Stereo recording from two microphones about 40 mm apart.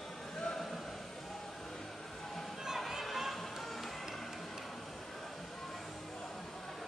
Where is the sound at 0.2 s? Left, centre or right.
Centre.